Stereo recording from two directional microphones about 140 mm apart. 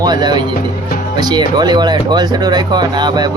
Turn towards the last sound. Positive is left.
turn(degrees=-30)  # may be behind; listen again after turning